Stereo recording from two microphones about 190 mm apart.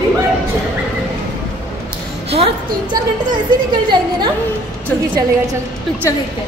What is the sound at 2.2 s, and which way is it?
A woman's voice, 30° right (ahead or behind).